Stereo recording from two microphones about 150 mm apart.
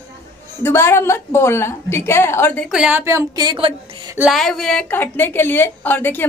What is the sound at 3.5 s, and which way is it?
Speech, 40° right (ahead or behind).